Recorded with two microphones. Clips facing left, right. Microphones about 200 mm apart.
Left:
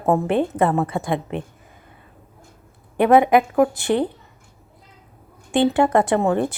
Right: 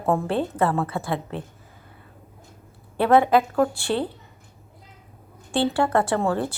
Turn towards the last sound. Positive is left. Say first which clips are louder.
# left 4 dB
turn(degrees=20)  # may be behind; listen again after turning